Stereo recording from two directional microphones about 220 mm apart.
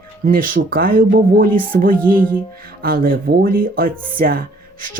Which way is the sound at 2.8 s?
40° right (ahead or behind).